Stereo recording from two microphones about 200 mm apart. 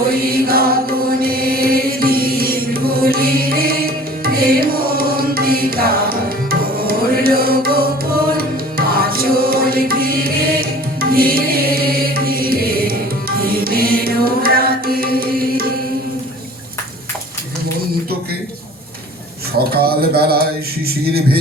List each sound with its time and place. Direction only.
0.3 s mantra: 50° right (ahead or behind)
1.2 s music: 50° right (ahead or behind)
19.5 s a sound: 50° right (ahead or behind)